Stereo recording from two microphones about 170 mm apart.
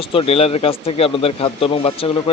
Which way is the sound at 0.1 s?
35° left (ahead or behind).